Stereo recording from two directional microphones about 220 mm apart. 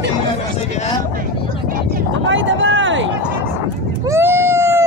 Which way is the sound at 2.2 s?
60° right (ahead or behind).